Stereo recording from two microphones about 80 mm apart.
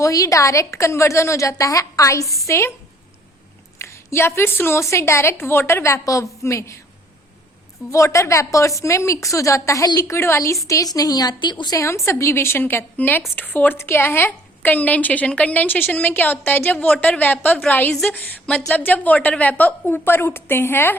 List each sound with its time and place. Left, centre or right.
0.0 s a woman's voice: left
3.8 s a woman's voice: left
7.9 s a woman's voice: left
9.8 s speech: left
10.1 s a woman's voice: left
10.7 s speech: left
11.7 s a woman's voice: left
16.7 s a woman's voice: centre